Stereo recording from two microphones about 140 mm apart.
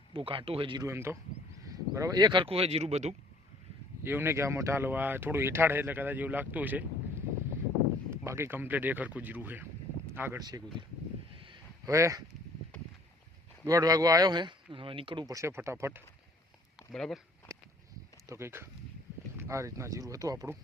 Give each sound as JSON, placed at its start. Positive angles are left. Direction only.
{"t": 0.1, "sound": "speech", "side_deg": -40}
{"t": 0.9, "sound": "speech", "side_deg": -20}
{"t": 4.0, "sound": "speech", "side_deg": -15}
{"t": 8.1, "sound": "speech", "side_deg": -20}
{"t": 10.4, "sound": "speech", "side_deg": -30}
{"t": 11.3, "sound": "a sound", "side_deg": -35}
{"t": 11.9, "sound": "speech", "side_deg": -20}
{"t": 13.7, "sound": "speech", "side_deg": -25}
{"t": 16.9, "sound": "speech", "side_deg": 5}
{"t": 17.5, "sound": "a sound", "side_deg": -20}
{"t": 18.3, "sound": "speech", "side_deg": -20}